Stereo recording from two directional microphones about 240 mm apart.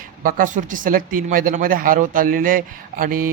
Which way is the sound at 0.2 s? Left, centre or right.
Right.